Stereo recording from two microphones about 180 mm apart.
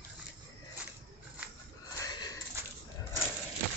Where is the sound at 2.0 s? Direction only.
20° left (ahead or behind).